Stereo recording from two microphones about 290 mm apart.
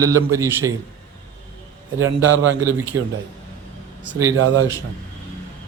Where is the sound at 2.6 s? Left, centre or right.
Centre.